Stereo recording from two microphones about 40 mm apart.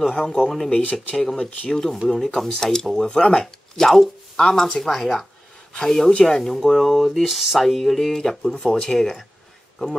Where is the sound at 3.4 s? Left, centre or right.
Centre.